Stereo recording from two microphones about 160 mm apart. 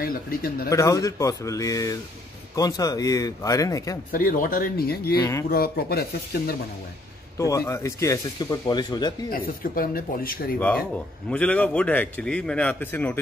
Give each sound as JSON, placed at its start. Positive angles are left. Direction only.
{"t": 0.0, "sound": "speech", "side_deg": 65}
{"t": 0.7, "sound": "speech", "side_deg": 20}
{"t": 4.1, "sound": "speech", "side_deg": 60}
{"t": 7.3, "sound": "speech", "side_deg": 20}
{"t": 9.3, "sound": "speech", "side_deg": 65}
{"t": 11.2, "sound": "a man's voice", "side_deg": 10}